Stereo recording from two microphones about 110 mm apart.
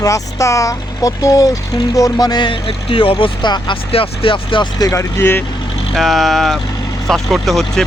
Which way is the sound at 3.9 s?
55° left (ahead or behind).